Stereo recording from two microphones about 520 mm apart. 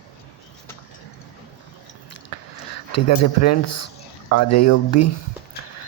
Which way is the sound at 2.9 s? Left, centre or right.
Left.